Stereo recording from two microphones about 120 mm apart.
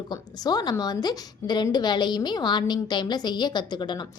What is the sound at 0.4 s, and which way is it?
A woman's voice, 35° left (ahead or behind).